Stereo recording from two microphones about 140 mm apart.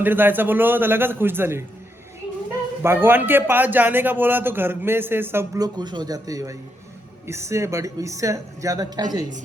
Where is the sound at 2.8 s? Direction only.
15° right (ahead or behind).